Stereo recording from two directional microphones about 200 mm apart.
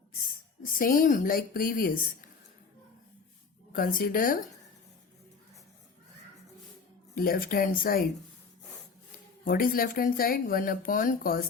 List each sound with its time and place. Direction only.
0.6 s a woman's voice: 45° left (ahead or behind)
3.7 s speech: 45° left (ahead or behind)
7.2 s speech: 45° left (ahead or behind)
9.4 s speech: 45° left (ahead or behind)